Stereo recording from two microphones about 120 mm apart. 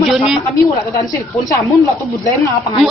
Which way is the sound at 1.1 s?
25° left (ahead or behind).